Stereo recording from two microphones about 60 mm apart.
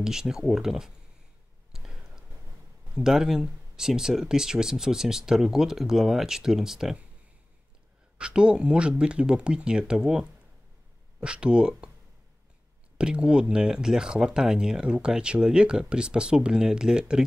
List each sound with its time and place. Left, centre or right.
0.0 s speech: centre
1.7 s a sound: centre
2.9 s speech: centre
8.2 s speech: centre
12.9 s speech: centre